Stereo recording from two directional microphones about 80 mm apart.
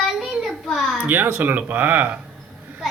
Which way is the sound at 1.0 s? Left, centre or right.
Right.